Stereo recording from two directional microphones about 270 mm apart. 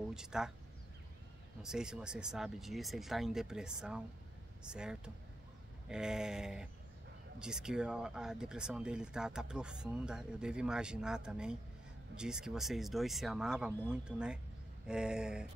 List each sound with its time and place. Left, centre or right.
0.1 s speech: centre
1.6 s speech: centre